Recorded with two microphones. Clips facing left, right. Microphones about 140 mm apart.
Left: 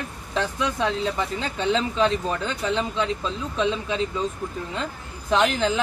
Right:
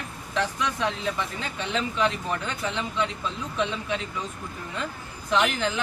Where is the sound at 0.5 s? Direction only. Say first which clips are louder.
Left 3 dB; 30° left (ahead or behind).